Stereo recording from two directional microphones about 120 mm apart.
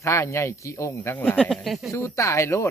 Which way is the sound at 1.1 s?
10° left (ahead or behind).